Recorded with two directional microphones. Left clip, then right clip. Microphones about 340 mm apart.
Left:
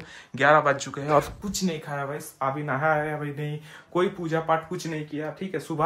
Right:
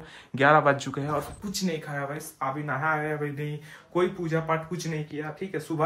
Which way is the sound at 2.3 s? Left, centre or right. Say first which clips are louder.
Left 3 dB; left.